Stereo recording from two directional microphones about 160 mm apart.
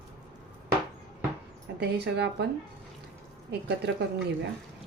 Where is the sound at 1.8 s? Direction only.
90° right.